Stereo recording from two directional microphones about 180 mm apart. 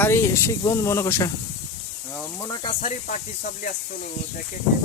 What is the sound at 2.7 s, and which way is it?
Speech, 35° left (ahead or behind).